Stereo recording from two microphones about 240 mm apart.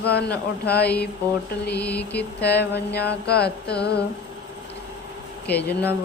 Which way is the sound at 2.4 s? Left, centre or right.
Left.